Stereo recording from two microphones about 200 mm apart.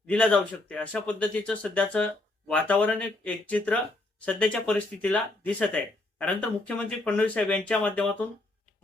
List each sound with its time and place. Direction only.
0.1 s speech: 5° left (ahead or behind)